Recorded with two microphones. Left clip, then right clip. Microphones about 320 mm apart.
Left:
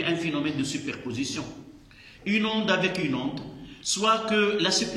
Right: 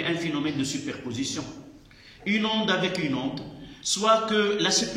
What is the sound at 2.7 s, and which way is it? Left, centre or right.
Speech, left.